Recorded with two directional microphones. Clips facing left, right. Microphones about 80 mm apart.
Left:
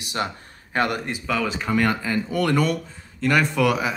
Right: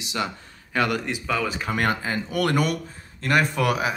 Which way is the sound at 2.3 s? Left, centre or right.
Right.